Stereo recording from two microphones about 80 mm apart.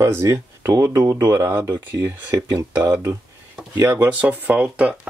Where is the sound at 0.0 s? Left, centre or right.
Right.